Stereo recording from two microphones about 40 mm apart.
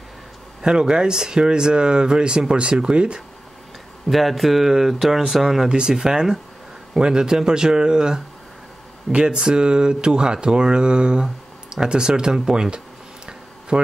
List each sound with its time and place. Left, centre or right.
0.6 s speech: centre
4.1 s speech: centre
5.7 s speech: right